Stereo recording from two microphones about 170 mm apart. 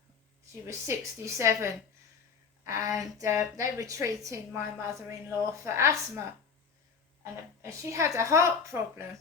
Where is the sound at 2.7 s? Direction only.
20° right (ahead or behind).